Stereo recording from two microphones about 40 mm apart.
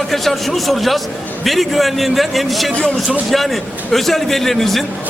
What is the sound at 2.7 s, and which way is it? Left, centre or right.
Speech, left.